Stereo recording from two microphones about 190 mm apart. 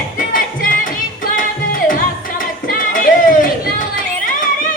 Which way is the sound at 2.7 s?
45° left (ahead or behind).